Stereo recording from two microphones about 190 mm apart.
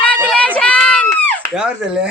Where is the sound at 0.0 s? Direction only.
5° left (ahead or behind).